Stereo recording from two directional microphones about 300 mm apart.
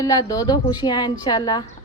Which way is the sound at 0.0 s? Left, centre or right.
Centre.